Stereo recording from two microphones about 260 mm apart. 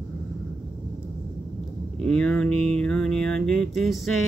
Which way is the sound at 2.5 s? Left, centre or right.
Right.